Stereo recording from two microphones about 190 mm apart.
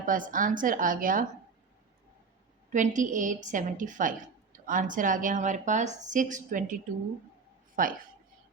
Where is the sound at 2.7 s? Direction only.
40° right (ahead or behind).